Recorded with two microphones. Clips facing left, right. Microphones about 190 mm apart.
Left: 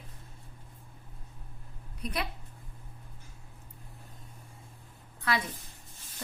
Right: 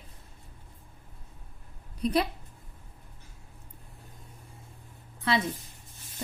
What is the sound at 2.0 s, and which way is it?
Speech, 30° right (ahead or behind).